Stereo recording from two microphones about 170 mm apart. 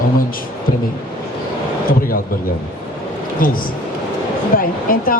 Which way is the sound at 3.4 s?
55° left (ahead or behind).